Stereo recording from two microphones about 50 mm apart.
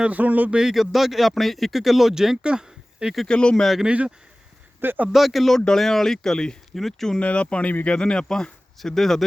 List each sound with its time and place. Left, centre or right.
0.0 s speech: right
0.5 s speech: centre
2.4 s a sound: centre
3.2 s speech: centre
3.8 s speech: right
4.8 s speech: right
5.1 s speech: centre
7.2 s speech: left; by 9.2 s centre